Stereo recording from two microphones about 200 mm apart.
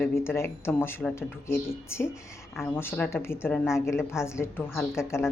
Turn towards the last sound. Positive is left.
turn(degrees=15)  # may be behind; listen again after turning